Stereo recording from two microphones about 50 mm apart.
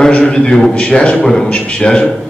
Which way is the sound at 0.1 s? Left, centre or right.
Centre.